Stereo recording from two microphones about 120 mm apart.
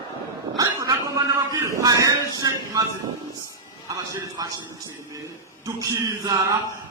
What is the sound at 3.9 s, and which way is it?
Speech, 30° right (ahead or behind).